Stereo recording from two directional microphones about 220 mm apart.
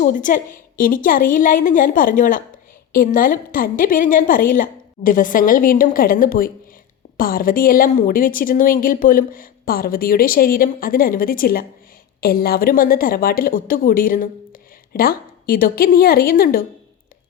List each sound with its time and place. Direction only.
0.0 s a woman's voice: 35° left (ahead or behind)